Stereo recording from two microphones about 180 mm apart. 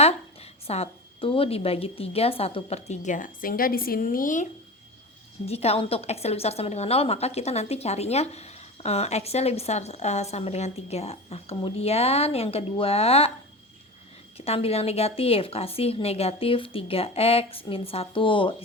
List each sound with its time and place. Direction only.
0.0 s a woman's voice: 35° left (ahead or behind)
5.5 s a woman's voice: 35° left (ahead or behind)
14.3 s a woman's voice: 35° left (ahead or behind)